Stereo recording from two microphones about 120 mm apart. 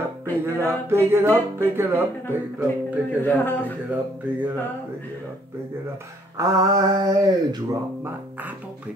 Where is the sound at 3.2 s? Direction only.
15° left (ahead or behind).